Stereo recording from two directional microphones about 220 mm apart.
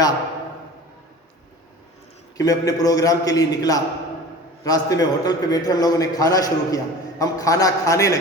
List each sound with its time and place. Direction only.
2.4 s a man's voice: 15° left (ahead or behind)